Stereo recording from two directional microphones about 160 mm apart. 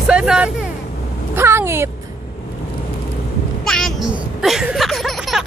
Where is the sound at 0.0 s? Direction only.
5° right (ahead or behind).